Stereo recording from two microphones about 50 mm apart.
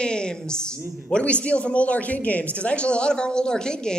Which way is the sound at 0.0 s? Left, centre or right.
Centre.